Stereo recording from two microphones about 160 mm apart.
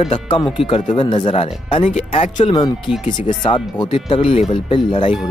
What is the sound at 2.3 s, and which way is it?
Speech, 30° left (ahead or behind).